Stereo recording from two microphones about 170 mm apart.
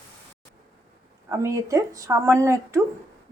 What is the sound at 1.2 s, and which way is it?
Speech, 15° right (ahead or behind).